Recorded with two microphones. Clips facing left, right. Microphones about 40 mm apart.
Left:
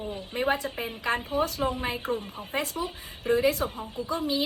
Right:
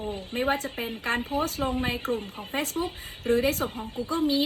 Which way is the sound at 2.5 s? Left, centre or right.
Right.